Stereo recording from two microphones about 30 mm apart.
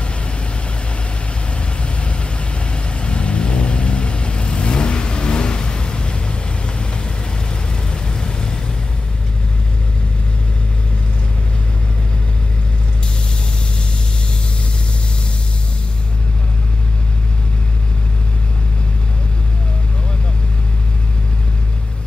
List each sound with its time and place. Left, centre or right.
2.7 s vehicle: left